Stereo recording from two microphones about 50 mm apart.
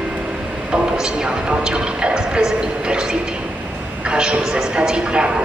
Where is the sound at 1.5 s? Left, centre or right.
Centre.